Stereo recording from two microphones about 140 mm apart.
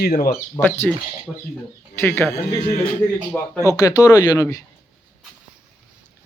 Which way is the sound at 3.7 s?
25° left (ahead or behind).